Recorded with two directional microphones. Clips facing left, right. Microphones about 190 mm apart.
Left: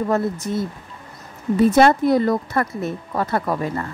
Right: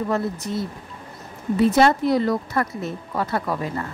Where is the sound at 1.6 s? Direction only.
50° left (ahead or behind).